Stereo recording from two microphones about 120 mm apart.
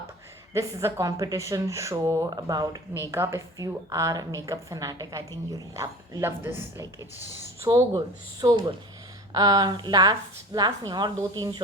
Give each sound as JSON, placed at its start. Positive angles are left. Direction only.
{"t": 0.5, "sound": "a woman's voice", "side_deg": -20}